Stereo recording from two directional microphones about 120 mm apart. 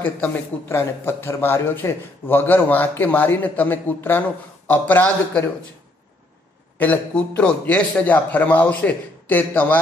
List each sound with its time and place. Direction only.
0.0 s a man's voice: 20° left (ahead or behind)
6.8 s a man's voice: 10° left (ahead or behind)